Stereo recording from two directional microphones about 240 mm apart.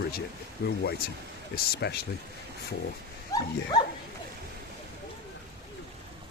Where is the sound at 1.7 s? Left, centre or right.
Left.